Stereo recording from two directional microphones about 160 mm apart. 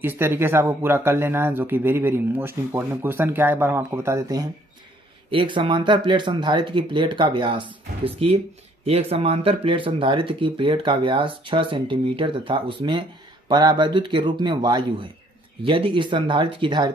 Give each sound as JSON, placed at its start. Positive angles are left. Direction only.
{"t": 0.0, "sound": "speech", "side_deg": -10}
{"t": 5.3, "sound": "speech", "side_deg": -30}